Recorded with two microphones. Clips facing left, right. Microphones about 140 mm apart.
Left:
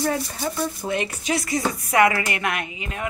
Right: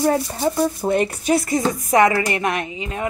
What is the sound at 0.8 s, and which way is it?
Speech, 45° right (ahead or behind).